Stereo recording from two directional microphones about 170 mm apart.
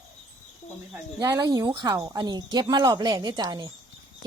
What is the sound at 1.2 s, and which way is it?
Speech, 20° right (ahead or behind).